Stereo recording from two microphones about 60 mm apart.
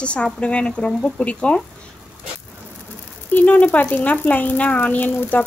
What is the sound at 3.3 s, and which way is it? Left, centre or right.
A woman's voice, left.